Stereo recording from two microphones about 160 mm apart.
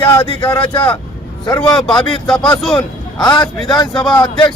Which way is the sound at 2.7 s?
30° left (ahead or behind).